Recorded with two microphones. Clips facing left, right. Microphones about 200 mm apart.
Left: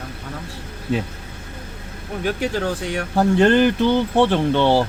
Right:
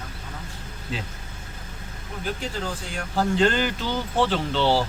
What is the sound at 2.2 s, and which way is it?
Speech, 70° left (ahead or behind).